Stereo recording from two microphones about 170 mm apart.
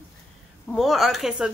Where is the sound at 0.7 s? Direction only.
Centre (ahead or behind).